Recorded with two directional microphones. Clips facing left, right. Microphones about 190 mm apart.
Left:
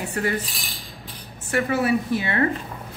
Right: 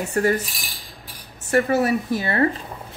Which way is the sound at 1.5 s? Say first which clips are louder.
Right 3 dB; 40° right (ahead or behind).